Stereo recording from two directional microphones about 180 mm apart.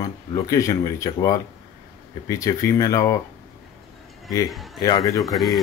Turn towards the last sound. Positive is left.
turn(degrees=0)  # may be behind; listen again after turning